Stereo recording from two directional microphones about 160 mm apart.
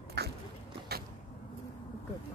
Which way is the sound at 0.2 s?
90° right.